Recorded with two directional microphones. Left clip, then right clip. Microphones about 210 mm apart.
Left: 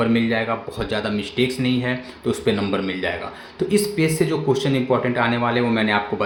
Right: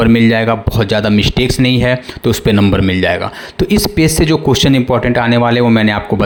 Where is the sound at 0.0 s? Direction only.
50° right (ahead or behind).